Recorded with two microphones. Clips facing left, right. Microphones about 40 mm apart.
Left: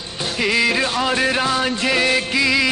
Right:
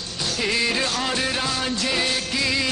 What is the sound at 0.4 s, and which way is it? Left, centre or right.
Music, left.